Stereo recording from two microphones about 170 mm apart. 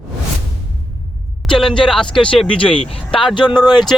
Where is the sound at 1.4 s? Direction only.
5° left (ahead or behind).